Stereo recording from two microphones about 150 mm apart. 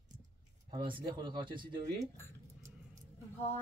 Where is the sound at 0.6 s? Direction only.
30° right (ahead or behind).